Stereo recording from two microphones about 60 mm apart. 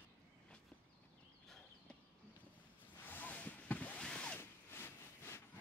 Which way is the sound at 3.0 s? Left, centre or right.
Left.